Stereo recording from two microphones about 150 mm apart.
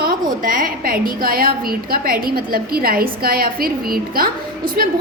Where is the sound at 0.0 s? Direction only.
70° right (ahead or behind).